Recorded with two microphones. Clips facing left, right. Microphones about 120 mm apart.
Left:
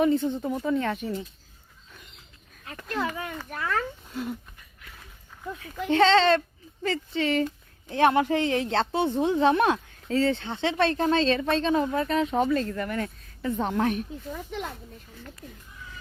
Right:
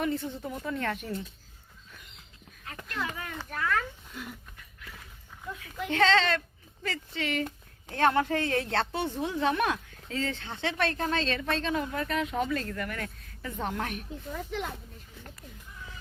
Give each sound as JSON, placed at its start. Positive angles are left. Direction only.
{"t": 0.0, "sound": "speech", "side_deg": 20}
{"t": 2.8, "sound": "speech", "side_deg": 35}
{"t": 5.5, "sound": "speech", "side_deg": 35}
{"t": 7.9, "sound": "speech", "side_deg": 15}